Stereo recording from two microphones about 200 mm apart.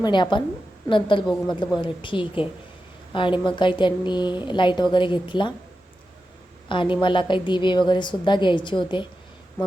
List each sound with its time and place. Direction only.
0.0 s a woman's voice: 25° left (ahead or behind)
6.7 s a woman's voice: 25° left (ahead or behind)